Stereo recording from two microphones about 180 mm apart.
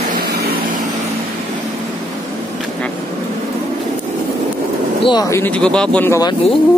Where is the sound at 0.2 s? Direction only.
60° right (ahead or behind).